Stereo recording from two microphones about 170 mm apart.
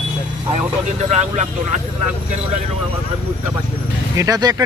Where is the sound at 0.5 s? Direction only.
40° right (ahead or behind).